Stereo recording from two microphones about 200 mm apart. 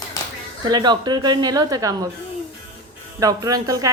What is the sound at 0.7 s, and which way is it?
Speech, 20° right (ahead or behind).